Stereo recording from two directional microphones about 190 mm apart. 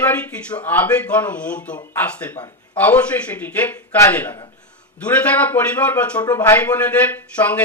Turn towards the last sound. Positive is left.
turn(degrees=5)  # may be behind; listen again after turning